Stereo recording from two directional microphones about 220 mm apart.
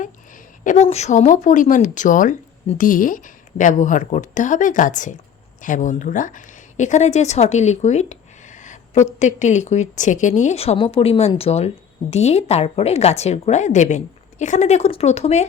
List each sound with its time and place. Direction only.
0.0 s a woman's voice: 35° left (ahead or behind)